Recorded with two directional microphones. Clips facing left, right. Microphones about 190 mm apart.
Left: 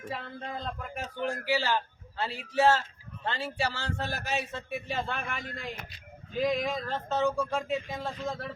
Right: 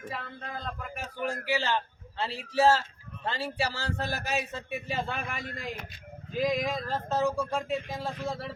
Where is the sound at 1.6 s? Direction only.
5° left (ahead or behind).